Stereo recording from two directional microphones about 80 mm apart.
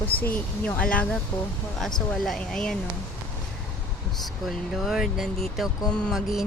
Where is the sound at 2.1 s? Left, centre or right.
Centre.